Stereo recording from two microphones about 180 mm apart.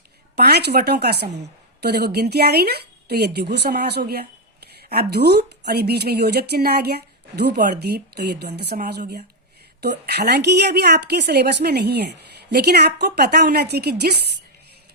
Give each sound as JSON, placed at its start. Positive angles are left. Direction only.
{"t": 0.3, "sound": "speech", "side_deg": -65}